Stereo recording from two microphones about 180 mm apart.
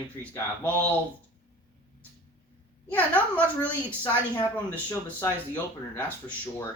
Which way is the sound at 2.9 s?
10° left (ahead or behind).